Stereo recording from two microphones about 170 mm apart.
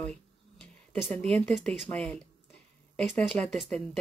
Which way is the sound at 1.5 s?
Centre (ahead or behind).